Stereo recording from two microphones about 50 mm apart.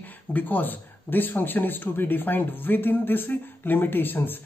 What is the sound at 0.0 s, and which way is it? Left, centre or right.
Speech, left.